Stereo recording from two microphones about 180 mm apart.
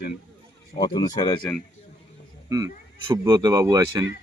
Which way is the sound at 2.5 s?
20° right (ahead or behind).